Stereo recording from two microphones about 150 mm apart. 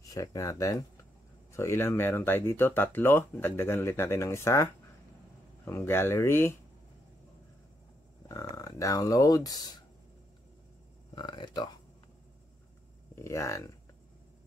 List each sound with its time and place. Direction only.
0.0 s speech: 25° left (ahead or behind)
5.7 s speech: 15° left (ahead or behind)
8.3 s speech: 25° left (ahead or behind)
11.1 s speech: 30° left (ahead or behind)
13.1 s speech: 20° left (ahead or behind)